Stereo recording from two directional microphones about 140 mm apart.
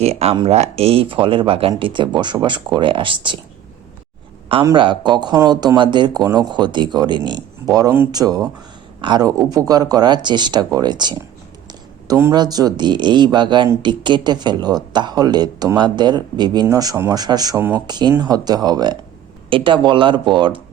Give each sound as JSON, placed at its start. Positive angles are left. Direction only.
{"t": 0.0, "sound": "speech", "side_deg": -45}
{"t": 4.6, "sound": "speech", "side_deg": -35}
{"t": 11.7, "sound": "a sound", "side_deg": -25}
{"t": 12.4, "sound": "speech", "side_deg": -30}
{"t": 17.6, "sound": "speech", "side_deg": -15}
{"t": 17.8, "sound": "speech", "side_deg": -30}